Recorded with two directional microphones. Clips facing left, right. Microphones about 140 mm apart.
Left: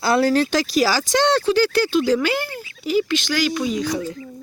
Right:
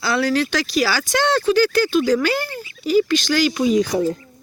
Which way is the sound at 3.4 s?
10° right (ahead or behind).